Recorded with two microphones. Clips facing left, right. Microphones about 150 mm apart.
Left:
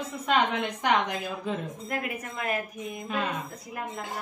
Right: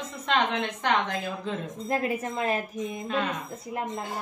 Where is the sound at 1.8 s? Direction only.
30° right (ahead or behind).